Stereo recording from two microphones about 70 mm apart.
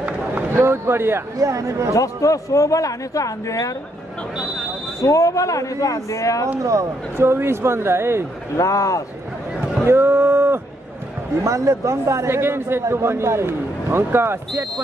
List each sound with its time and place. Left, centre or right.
0.5 s a man's voice: right
1.3 s speech: right
2.0 s a man's voice: left
5.0 s a man's voice: left
6.6 s a man's voice: right
8.5 s a man's voice: left
9.8 s speech: right
11.4 s a man's voice: right